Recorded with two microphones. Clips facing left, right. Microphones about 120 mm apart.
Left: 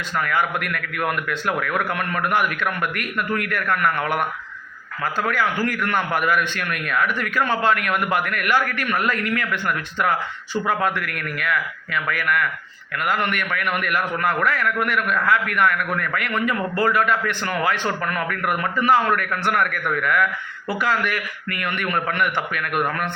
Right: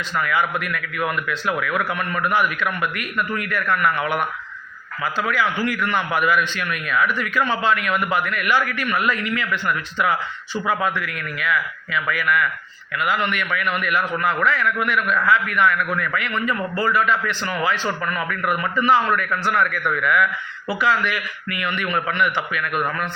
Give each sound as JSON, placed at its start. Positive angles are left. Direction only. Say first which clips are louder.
{"t": 0.2, "sound": "a man's voice", "louder": "even", "side_deg": 50}